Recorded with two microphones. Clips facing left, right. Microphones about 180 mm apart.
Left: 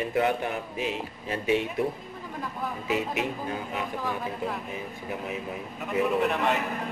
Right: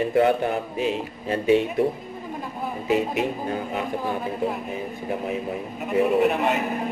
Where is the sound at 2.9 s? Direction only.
35° right (ahead or behind).